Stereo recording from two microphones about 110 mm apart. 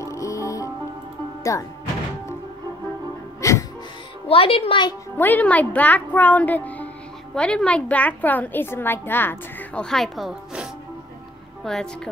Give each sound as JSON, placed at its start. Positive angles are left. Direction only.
{"t": 0.0, "sound": "music", "side_deg": 30}
{"t": 1.5, "sound": "speech", "side_deg": 25}
{"t": 3.3, "sound": "music", "side_deg": 30}
{"t": 4.3, "sound": "a woman's voice", "side_deg": 60}
{"t": 5.1, "sound": "a woman's voice", "side_deg": 15}
{"t": 9.8, "sound": "speech", "side_deg": 5}